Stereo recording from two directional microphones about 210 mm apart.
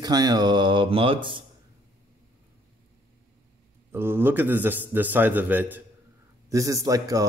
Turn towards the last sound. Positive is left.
turn(degrees=-15)  # may be behind; listen again after turning